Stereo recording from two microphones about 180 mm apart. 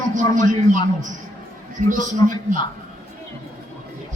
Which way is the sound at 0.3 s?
45° right (ahead or behind).